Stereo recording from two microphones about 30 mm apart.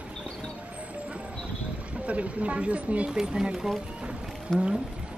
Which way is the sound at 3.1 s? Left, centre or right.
Right.